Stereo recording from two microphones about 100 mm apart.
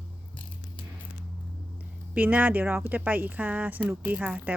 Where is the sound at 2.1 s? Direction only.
15° right (ahead or behind).